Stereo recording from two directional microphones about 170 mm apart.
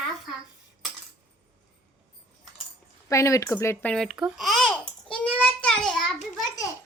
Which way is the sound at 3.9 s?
Centre (ahead or behind).